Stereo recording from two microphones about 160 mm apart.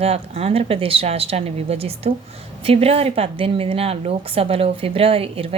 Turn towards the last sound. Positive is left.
turn(degrees=-35)  # may be behind; listen again after turning